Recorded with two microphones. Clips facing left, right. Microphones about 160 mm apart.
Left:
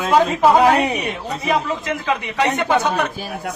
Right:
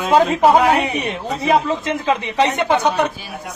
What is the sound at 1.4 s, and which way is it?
A woman's voice, 25° right (ahead or behind).